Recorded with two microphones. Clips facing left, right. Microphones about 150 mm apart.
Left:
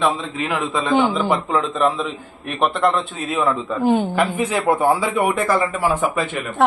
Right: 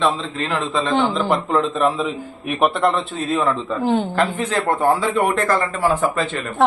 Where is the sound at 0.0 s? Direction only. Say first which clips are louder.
Even; 10° left (ahead or behind).